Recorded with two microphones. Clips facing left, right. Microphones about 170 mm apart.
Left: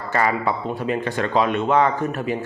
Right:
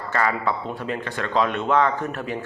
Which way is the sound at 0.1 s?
10° left (ahead or behind).